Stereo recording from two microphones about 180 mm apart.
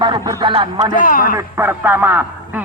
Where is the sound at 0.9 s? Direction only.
50° left (ahead or behind).